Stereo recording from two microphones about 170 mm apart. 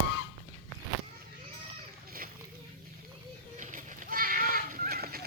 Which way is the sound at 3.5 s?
50° right (ahead or behind).